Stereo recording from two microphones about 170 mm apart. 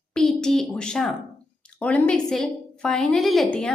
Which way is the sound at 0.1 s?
5° left (ahead or behind).